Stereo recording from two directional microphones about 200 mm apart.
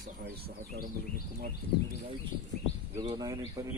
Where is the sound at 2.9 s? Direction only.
20° right (ahead or behind).